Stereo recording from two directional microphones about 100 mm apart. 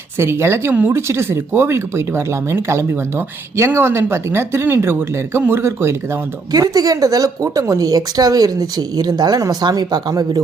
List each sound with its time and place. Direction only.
0.2 s speech: 25° right (ahead or behind)
6.5 s a woman's voice: 40° right (ahead or behind)